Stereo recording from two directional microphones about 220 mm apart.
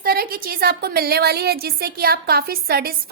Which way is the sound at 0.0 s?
45° right (ahead or behind).